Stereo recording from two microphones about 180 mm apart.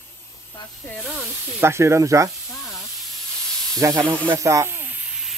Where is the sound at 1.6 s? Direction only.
15° right (ahead or behind).